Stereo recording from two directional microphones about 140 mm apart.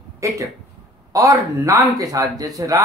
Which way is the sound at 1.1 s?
25° right (ahead or behind).